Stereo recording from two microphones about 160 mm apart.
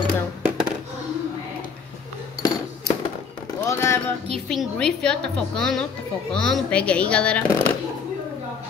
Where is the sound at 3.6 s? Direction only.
15° left (ahead or behind).